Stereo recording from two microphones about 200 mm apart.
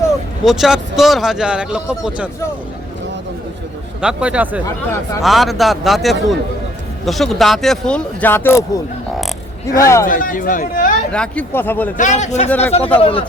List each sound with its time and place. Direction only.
0.4 s speech: centre (ahead or behind)
4.0 s speech: 5° right (ahead or behind)
4.6 s speech: 15° left (ahead or behind)
5.2 s speech: centre (ahead or behind)
9.8 s speech: 15° left (ahead or behind)
10.1 s speech: 45° left (ahead or behind)
11.1 s speech: 5° left (ahead or behind)
11.9 s a man's voice: 35° left (ahead or behind)
12.5 s speech: 10° left (ahead or behind)
13.0 s speech: 25° left (ahead or behind)